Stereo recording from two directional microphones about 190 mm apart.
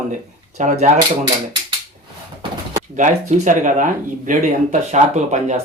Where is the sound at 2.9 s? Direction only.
40° right (ahead or behind).